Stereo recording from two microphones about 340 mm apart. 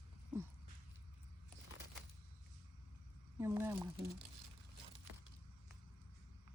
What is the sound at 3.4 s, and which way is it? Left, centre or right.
Speech, centre.